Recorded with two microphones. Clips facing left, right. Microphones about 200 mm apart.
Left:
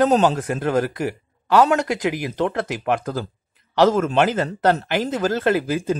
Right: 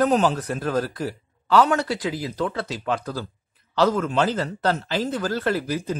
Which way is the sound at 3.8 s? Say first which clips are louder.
Left 4 dB; 90° left.